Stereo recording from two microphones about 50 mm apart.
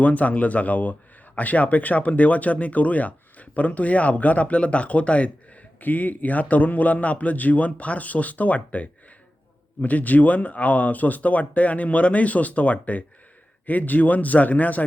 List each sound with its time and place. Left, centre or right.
0.0 s speech: left